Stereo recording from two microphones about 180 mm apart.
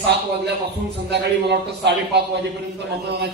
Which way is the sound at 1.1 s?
70° right (ahead or behind).